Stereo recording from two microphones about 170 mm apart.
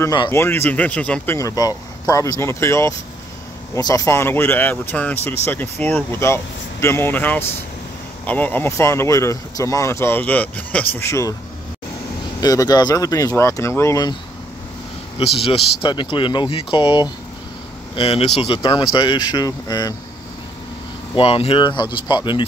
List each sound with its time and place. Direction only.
0.0 s speech: 20° left (ahead or behind)
12.4 s speech: 20° left (ahead or behind)
15.3 s speech: 35° left (ahead or behind)
21.1 s speech: 35° left (ahead or behind)